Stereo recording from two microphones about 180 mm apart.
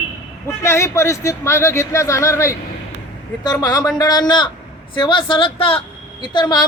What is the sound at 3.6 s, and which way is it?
A woman's voice, 20° left (ahead or behind).